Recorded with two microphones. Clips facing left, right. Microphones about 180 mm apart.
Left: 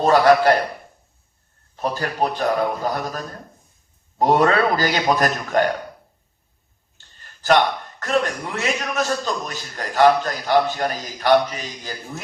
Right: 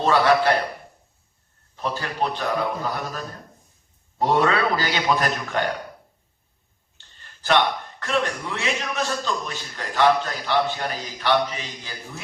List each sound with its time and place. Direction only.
0.0 s a man's voice: 45° left (ahead or behind)
1.7 s a man's voice: 45° left (ahead or behind)
7.4 s a man's voice: 45° left (ahead or behind)